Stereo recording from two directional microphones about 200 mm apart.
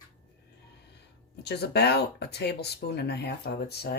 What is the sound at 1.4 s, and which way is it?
Speech, 55° left (ahead or behind).